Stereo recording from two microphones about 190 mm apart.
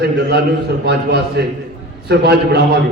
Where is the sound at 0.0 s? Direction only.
55° right (ahead or behind).